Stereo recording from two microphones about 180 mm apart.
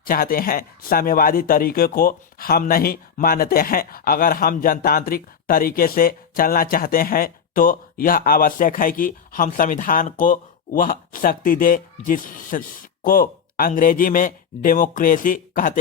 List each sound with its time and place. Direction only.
0.1 s speech: 55° left (ahead or behind)